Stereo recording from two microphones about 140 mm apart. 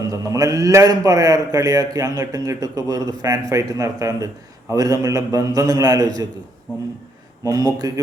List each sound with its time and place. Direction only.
0.1 s a man's voice: 25° right (ahead or behind)
7.4 s a man's voice: 25° right (ahead or behind)